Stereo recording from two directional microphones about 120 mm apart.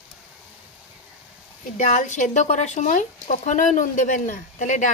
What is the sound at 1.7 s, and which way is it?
Speech, 90° left.